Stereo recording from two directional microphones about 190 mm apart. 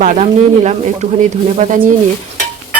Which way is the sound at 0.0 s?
40° right (ahead or behind).